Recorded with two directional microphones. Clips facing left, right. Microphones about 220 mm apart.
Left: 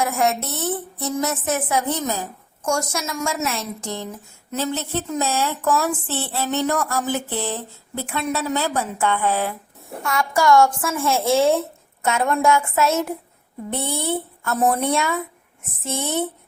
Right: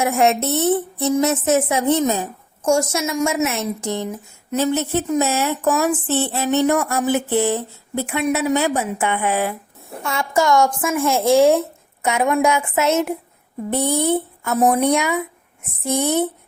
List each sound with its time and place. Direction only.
0.0 s a woman's voice: 25° right (ahead or behind)
10.0 s a woman's voice: 25° right (ahead or behind)